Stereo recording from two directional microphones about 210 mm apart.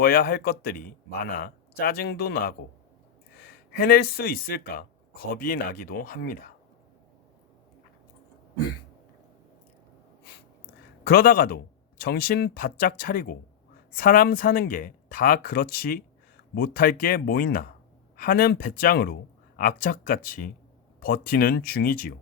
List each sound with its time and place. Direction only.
0.0 s speech: 45° left (ahead or behind)
11.0 s speech: 45° left (ahead or behind)